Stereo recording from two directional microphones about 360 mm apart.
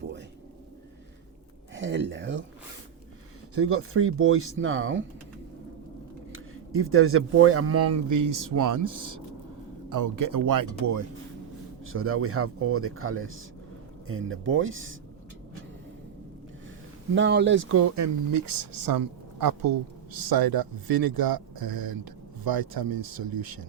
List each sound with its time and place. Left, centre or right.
1.7 s speech: right
3.5 s speech: right
6.3 s speech: right
11.9 s speech: right
17.2 s speech: right